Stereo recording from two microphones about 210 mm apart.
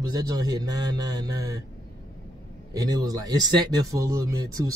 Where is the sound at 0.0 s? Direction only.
20° right (ahead or behind).